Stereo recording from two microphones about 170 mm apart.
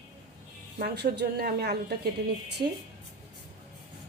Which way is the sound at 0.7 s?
70° right (ahead or behind).